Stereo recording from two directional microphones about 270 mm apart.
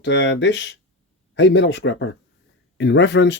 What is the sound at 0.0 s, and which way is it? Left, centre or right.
Speech, left.